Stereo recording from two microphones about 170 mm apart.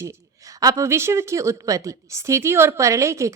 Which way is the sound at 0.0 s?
20° right (ahead or behind).